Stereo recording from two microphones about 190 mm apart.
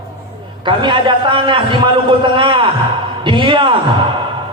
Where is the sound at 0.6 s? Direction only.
25° right (ahead or behind).